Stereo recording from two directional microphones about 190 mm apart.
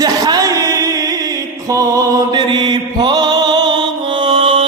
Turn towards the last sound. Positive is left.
turn(degrees=-25)  # may be behind; listen again after turning